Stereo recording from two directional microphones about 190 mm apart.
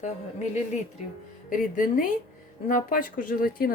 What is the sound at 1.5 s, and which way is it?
Speech, 45° left (ahead or behind).